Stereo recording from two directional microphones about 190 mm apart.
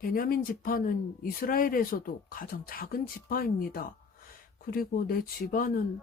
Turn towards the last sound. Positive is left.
turn(degrees=50)  # may be behind; listen again after turning